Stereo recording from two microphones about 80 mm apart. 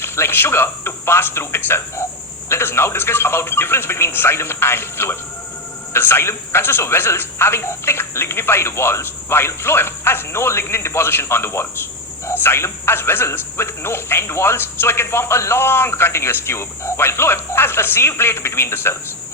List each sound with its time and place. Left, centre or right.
0.0 s a man's voice: left